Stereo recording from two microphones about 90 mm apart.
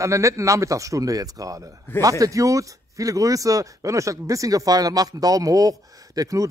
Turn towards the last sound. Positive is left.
turn(degrees=-40)  # may be behind; listen again after turning